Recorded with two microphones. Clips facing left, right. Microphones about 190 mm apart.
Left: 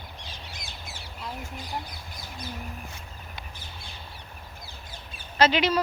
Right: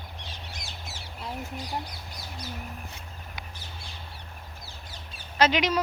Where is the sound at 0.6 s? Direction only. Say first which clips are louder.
Even; 55° left (ahead or behind).